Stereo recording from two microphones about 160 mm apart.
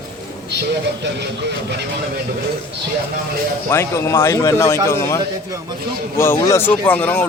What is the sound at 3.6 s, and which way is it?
A man's voice, 15° left (ahead or behind).